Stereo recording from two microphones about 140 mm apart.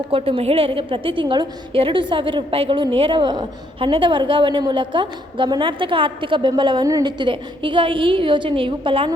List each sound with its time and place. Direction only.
0.1 s a woman's voice: 40° right (ahead or behind)